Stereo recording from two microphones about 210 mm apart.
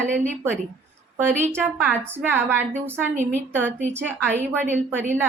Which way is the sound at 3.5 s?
10° right (ahead or behind).